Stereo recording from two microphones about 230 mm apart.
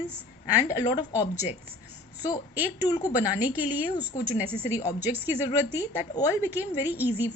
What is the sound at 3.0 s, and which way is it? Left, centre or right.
Speech, centre.